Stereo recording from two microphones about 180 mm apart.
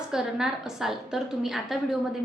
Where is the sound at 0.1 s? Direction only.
5° right (ahead or behind).